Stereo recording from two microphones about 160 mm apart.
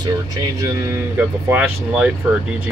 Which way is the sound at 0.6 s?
15° right (ahead or behind).